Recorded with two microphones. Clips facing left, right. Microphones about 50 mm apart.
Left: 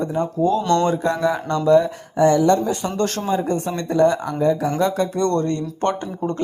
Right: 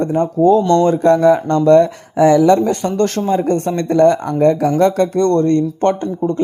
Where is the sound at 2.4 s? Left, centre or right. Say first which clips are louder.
Right 5 dB; right.